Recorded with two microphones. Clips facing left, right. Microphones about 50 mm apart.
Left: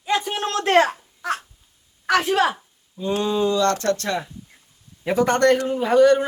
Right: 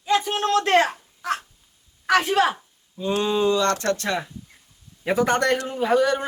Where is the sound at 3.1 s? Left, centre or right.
Right.